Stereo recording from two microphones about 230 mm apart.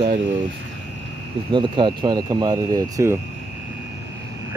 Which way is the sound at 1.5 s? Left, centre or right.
Right.